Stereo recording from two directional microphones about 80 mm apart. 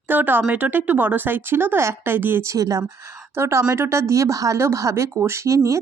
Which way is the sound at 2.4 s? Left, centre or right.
Right.